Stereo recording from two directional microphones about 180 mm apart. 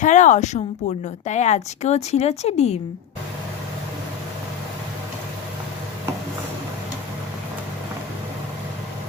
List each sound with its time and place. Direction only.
0.0 s a woman's voice: 45° left (ahead or behind)